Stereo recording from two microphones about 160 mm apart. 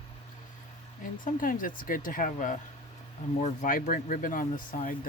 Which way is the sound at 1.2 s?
55° left (ahead or behind).